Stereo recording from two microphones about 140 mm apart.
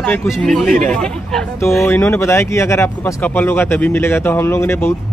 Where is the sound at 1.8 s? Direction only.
15° left (ahead or behind).